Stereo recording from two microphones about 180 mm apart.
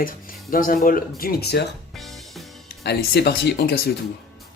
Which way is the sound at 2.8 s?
65° left (ahead or behind).